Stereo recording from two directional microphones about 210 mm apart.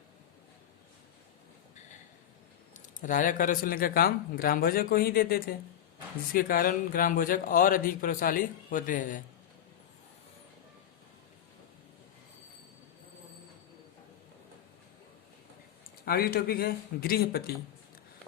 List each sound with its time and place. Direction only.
2.7 s speech: 35° left (ahead or behind)
16.0 s speech: 45° left (ahead or behind)